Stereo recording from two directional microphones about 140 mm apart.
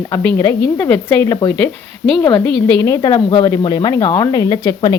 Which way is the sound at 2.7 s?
20° left (ahead or behind).